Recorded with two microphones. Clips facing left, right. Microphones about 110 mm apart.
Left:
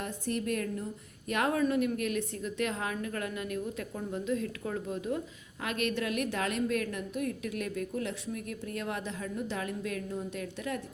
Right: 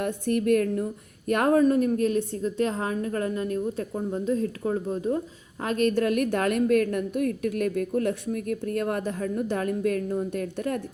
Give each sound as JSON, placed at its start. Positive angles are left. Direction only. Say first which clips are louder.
{"t": 0.0, "sound": "a woman's voice", "louder": "right 9 dB", "side_deg": -55}